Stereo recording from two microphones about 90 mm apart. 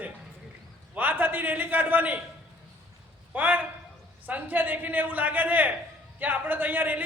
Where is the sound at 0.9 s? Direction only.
20° right (ahead or behind).